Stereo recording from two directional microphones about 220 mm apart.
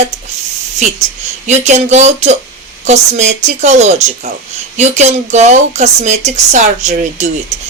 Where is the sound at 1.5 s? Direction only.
30° right (ahead or behind).